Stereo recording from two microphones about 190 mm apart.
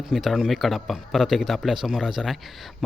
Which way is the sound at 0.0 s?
Centre (ahead or behind).